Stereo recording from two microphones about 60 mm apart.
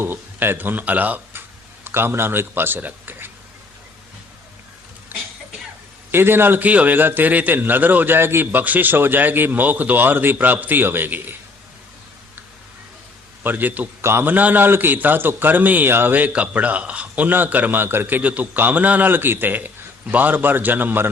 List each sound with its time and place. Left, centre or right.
0.0 s speech: right
5.1 s cough: right
6.1 s a man's voice: right
6.7 s a man's voice: right
13.4 s a man's voice: right
14.0 s a man's voice: right
18.2 s a man's voice: right